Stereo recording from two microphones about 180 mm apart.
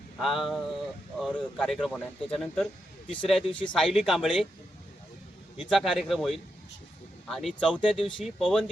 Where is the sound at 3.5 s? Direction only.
25° left (ahead or behind).